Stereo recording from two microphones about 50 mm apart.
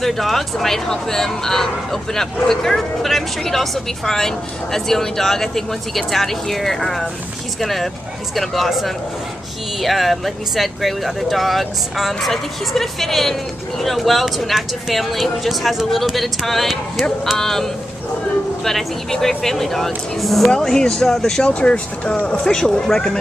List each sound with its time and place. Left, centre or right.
0.0 s speech: centre
21.5 s speech: left